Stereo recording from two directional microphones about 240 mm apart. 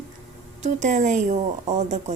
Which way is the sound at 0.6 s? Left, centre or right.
Right.